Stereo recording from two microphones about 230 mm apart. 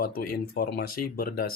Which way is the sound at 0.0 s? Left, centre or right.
Left.